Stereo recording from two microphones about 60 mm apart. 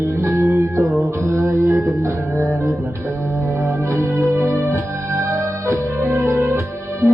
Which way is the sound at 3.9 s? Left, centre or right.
Right.